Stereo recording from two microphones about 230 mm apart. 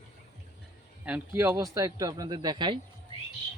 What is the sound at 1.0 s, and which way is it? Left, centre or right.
A man's voice, centre.